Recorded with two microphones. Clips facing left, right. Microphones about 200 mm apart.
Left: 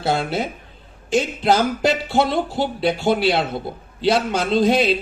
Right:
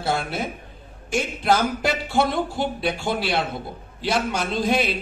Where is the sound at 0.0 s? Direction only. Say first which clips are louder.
Left 4 dB; 20° left (ahead or behind).